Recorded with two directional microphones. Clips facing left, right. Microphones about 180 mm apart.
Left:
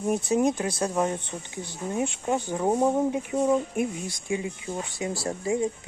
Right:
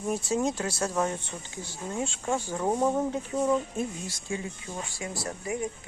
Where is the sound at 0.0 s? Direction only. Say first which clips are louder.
Left 4 dB; 20° left (ahead or behind).